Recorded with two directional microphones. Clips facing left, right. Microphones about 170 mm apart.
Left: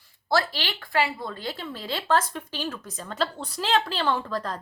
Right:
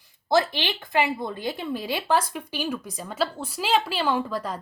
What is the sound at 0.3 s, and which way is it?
A woman's voice, 20° right (ahead or behind).